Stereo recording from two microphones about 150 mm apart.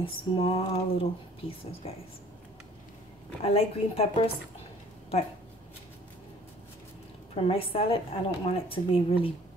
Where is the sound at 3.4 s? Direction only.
40° left (ahead or behind).